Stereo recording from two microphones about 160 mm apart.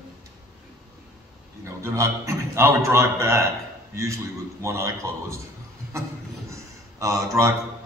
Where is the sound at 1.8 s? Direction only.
15° right (ahead or behind).